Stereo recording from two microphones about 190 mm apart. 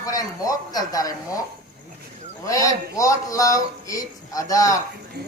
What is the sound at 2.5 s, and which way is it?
Speech, 15° left (ahead or behind).